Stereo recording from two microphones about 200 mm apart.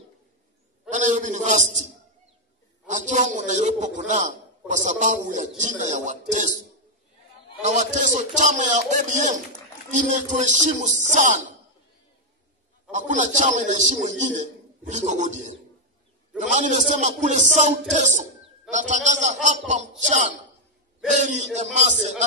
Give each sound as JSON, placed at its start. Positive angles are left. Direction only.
{"t": 0.9, "sound": "a man's voice", "side_deg": -40}
{"t": 2.9, "sound": "a man's voice", "side_deg": -40}
{"t": 7.6, "sound": "a man's voice", "side_deg": -35}
{"t": 12.9, "sound": "a man's voice", "side_deg": -40}